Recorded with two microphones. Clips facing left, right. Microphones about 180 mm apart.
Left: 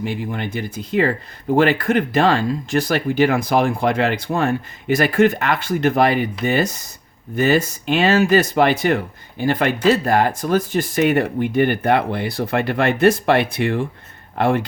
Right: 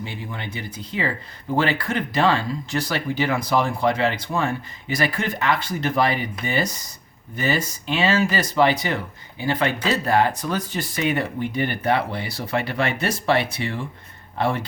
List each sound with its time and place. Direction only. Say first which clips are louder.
0.3 s speech: left 7 dB; 50° left (ahead or behind)